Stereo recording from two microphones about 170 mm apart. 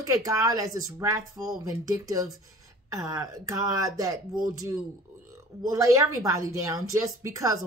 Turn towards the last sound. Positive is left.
turn(degrees=-20)  # may be behind; listen again after turning